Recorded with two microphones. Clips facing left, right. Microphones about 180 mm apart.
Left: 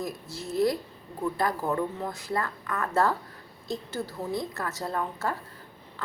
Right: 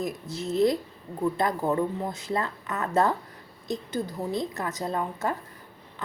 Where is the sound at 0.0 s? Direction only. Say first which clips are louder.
Right 4 dB; 20° right (ahead or behind).